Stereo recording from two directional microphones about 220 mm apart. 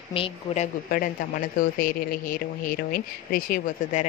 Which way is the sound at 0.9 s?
40° left (ahead or behind).